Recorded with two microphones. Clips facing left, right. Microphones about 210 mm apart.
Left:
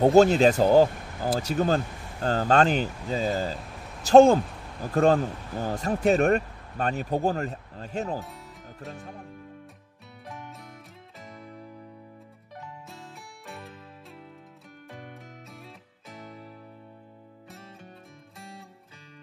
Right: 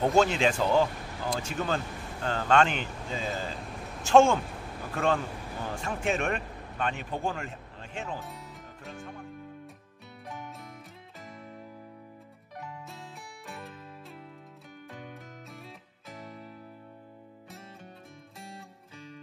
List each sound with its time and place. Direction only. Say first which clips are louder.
0.0 s speech: left 7 dB; 40° left (ahead or behind)
8.2 s music: left 2 dB; centre (ahead or behind)
8.9 s music: even; 35° left (ahead or behind)
10.2 s music: even; centre (ahead or behind)
12.8 s music: even; centre (ahead or behind)
15.5 s music: even; centre (ahead or behind)